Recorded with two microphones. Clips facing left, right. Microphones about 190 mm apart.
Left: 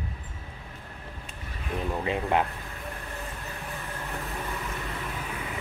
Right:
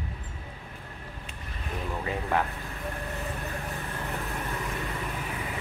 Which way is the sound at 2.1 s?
20° left (ahead or behind).